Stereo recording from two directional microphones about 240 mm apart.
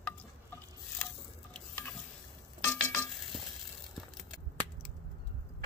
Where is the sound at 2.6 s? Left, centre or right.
Centre.